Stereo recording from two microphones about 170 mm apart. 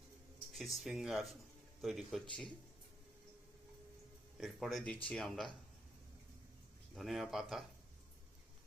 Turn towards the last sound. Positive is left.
turn(degrees=0)  # may be behind; listen again after turning